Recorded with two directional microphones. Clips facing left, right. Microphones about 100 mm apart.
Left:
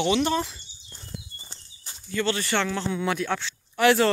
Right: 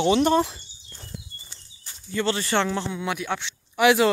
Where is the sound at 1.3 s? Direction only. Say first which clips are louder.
Left 1 dB; 25° left (ahead or behind).